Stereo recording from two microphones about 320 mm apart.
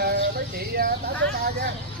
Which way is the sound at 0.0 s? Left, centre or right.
Right.